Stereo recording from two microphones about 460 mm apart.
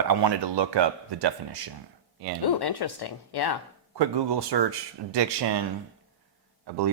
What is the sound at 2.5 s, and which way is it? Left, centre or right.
Speech, left.